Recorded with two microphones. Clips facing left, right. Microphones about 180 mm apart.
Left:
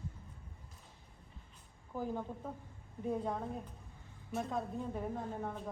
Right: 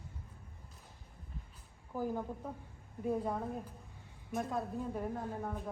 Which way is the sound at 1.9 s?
10° right (ahead or behind).